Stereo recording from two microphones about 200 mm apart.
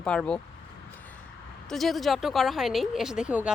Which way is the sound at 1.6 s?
Centre (ahead or behind).